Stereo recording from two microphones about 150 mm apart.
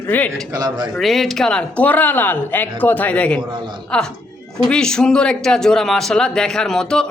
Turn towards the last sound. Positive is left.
turn(degrees=5)  # may be behind; listen again after turning